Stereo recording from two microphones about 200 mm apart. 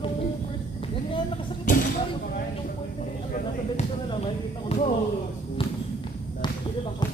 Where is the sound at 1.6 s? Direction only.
40° left (ahead or behind).